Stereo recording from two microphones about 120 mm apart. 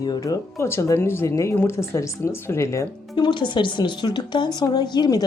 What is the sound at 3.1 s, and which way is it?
Speech, 40° left (ahead or behind).